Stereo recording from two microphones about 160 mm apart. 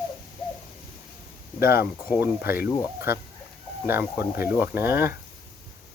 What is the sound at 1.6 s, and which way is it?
Speech, 15° right (ahead or behind).